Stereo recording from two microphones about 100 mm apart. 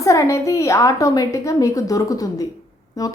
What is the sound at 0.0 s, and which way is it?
A woman's voice, 30° left (ahead or behind).